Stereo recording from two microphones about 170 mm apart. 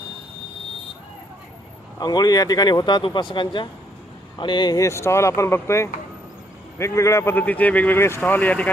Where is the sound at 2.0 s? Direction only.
25° left (ahead or behind).